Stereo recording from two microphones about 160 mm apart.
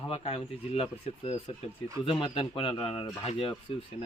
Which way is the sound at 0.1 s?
35° left (ahead or behind).